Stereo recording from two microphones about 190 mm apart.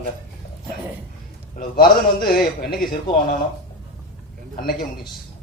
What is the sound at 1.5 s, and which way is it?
A man's voice, 50° left (ahead or behind).